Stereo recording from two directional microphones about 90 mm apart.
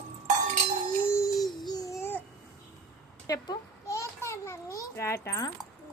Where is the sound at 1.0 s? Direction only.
30° left (ahead or behind).